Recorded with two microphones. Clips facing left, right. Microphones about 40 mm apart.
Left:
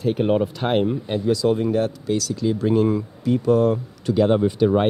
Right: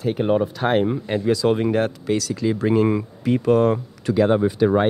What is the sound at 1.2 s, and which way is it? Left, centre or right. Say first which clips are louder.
Speech: right 1 dB; right.